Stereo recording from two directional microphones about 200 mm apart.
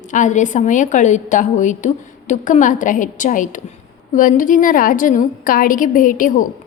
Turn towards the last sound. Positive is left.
turn(degrees=40)  # may be behind; listen again after turning